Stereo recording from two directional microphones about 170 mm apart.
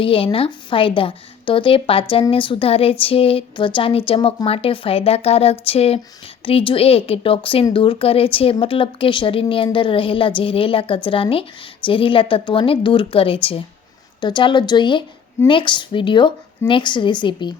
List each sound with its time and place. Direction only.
0.0 s speech: 30° left (ahead or behind)